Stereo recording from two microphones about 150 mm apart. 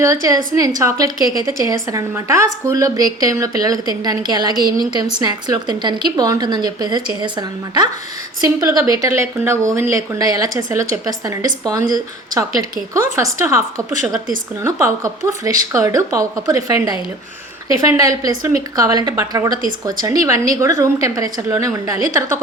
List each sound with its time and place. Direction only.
0.0 s a woman's voice: 20° right (ahead or behind)